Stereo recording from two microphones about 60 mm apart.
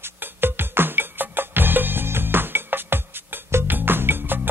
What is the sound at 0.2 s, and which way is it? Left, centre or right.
Music, right.